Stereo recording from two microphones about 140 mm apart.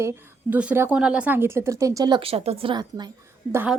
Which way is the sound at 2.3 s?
45° right (ahead or behind).